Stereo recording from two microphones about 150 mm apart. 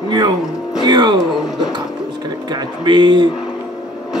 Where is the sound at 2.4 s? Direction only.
30° right (ahead or behind).